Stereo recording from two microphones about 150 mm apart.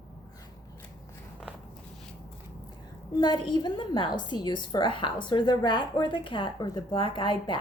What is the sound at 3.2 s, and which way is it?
A woman's voice, 30° left (ahead or behind).